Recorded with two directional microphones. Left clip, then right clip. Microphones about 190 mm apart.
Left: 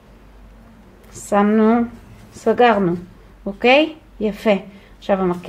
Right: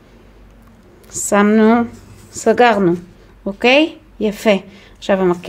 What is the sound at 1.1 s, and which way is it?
A woman's voice, 30° right (ahead or behind).